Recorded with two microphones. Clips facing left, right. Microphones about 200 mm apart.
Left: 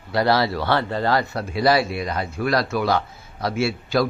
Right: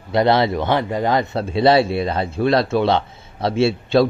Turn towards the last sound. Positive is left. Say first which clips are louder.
# right 6 dB
turn(degrees=-25)  # may be behind; listen again after turning